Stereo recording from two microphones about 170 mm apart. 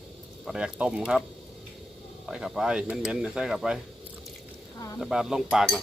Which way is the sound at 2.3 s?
5° right (ahead or behind).